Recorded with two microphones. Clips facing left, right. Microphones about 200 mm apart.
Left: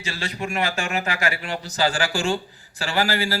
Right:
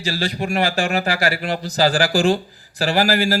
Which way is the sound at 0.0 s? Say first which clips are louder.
Right 6 dB; 35° right (ahead or behind).